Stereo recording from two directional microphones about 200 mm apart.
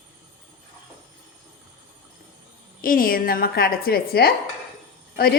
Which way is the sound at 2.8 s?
45° left (ahead or behind).